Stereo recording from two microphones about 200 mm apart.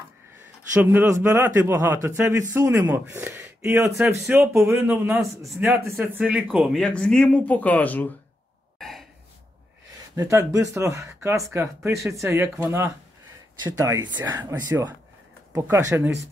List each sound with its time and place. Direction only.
0.7 s speech: 10° right (ahead or behind)
5.6 s speech: 10° right (ahead or behind); by 8.1 s 10° left (ahead or behind)
8.7 s a sound: centre (ahead or behind)
10.1 s speech: 15° right (ahead or behind)